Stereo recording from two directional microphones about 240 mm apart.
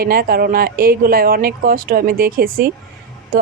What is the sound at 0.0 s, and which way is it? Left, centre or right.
A woman's voice, right.